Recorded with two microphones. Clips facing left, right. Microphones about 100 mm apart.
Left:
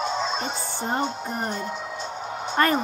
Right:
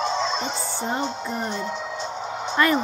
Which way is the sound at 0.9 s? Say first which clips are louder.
Left 1 dB; 50° left (ahead or behind).